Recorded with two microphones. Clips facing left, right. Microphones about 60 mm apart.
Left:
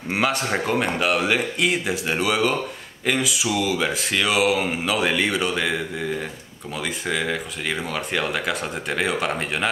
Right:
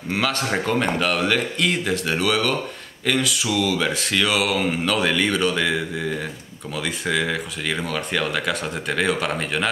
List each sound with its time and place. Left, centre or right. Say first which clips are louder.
0.1 s speech: left 1 dB; centre
0.5 s speech: right 1 dB; centre